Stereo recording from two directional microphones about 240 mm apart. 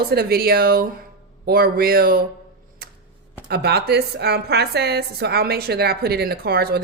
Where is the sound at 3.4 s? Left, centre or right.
Right.